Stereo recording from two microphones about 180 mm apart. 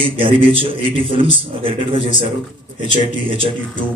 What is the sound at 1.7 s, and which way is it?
Speech, 40° left (ahead or behind).